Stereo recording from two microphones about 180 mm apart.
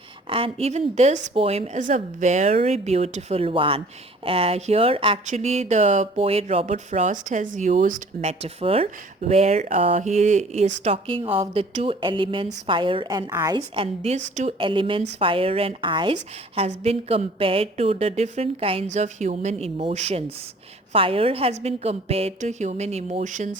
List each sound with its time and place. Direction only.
0.3 s speech: 30° right (ahead or behind)
10.8 s a woman's voice: 30° right (ahead or behind)
13.6 s a woman's voice: 35° right (ahead or behind)